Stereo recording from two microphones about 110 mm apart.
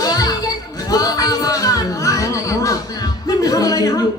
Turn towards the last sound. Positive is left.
turn(degrees=35)  # may be behind; listen again after turning